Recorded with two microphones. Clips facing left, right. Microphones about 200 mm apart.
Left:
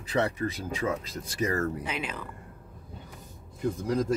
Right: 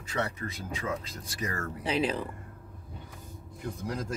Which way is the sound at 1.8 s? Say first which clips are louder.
Right 6 dB; 35° right (ahead or behind).